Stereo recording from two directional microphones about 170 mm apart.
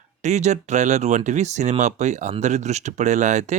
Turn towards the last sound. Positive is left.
turn(degrees=-45)  # may be behind; listen again after turning